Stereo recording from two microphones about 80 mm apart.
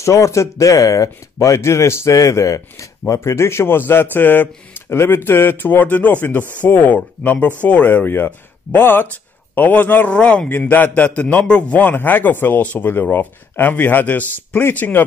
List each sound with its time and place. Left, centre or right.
0.0 s a man's voice: left